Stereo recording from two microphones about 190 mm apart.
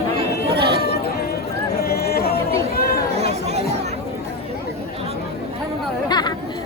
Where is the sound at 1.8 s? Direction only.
55° left (ahead or behind).